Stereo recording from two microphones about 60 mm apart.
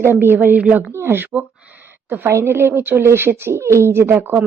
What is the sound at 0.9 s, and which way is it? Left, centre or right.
Speech, right.